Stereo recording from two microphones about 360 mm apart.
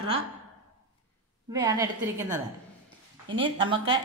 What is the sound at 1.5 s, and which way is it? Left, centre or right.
A woman's voice, centre.